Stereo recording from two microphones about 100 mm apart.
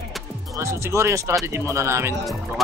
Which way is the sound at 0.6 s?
25° right (ahead or behind).